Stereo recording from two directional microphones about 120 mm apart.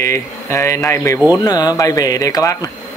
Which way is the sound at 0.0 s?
20° left (ahead or behind).